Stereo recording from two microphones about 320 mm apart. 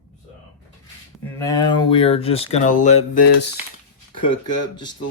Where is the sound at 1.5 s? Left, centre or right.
Centre.